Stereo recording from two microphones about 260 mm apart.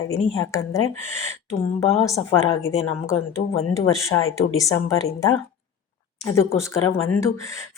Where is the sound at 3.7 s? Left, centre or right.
Centre.